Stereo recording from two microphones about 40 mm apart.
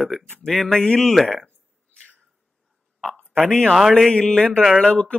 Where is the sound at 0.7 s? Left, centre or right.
Centre.